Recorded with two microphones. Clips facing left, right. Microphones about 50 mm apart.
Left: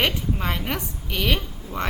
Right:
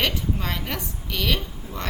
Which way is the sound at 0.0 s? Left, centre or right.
Centre.